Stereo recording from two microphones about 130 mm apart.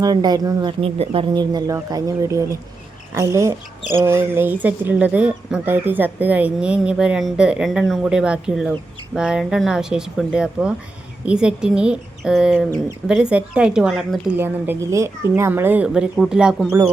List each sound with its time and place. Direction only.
0.0 s speech: 30° right (ahead or behind)
0.8 s speech: 45° right (ahead or behind)
1.3 s speech: 35° right (ahead or behind); by 14.3 s 5° right (ahead or behind)
14.3 s speech: 15° right (ahead or behind)
16.6 s speech: 15° right (ahead or behind)